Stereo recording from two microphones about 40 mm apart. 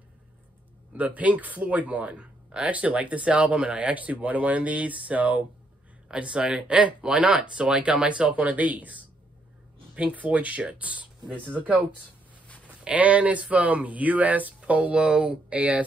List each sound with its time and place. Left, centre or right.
0.9 s speech: right
6.1 s speech: right
10.1 s speech: right
12.9 s speech: right